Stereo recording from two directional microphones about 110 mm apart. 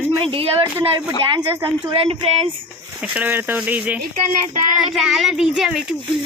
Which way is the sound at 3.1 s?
15° right (ahead or behind).